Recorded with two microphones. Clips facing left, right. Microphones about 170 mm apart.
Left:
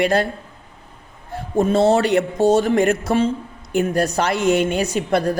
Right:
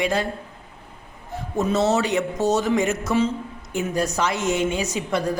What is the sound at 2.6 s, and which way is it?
A woman's voice, 60° left (ahead or behind).